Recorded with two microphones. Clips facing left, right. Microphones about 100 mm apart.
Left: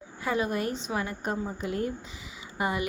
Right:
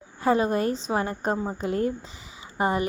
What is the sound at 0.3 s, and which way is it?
Speech, 35° right (ahead or behind).